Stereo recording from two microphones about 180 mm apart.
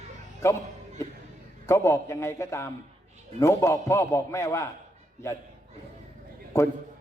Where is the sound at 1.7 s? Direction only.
15° left (ahead or behind).